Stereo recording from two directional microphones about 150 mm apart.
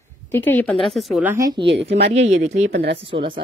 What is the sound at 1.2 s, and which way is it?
Speech, 10° right (ahead or behind).